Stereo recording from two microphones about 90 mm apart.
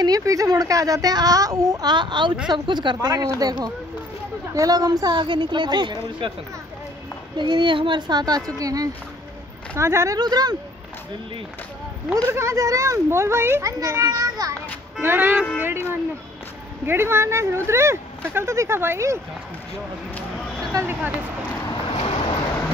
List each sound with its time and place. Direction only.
0.0 s a woman's voice: 40° right (ahead or behind); by 5.9 s 55° right (ahead or behind)
6.2 s speech: 70° right (ahead or behind)
7.3 s a woman's voice: 60° right (ahead or behind); by 10.1 s 30° right (ahead or behind)
10.1 s a woman's voice: 50° right (ahead or behind)
12.3 s speech: 35° right (ahead or behind)
15.0 s speech: 25° right (ahead or behind)
21.8 s boat: 90° left